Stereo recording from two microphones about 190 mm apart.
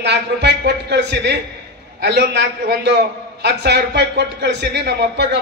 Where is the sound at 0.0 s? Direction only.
65° right (ahead or behind).